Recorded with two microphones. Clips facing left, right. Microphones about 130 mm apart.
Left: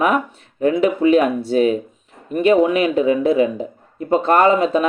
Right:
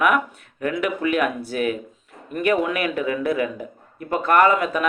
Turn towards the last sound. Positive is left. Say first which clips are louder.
# left 3 dB
turn(degrees=25)  # may be behind; listen again after turning